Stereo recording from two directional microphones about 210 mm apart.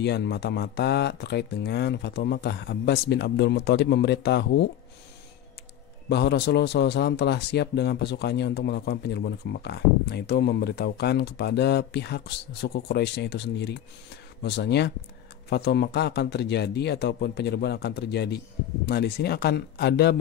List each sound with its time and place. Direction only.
0.0 s a man's voice: 55° left (ahead or behind)
6.0 s a man's voice: 55° left (ahead or behind)